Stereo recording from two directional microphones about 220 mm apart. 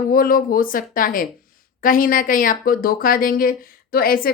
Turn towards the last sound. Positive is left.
turn(degrees=40)  # may be behind; listen again after turning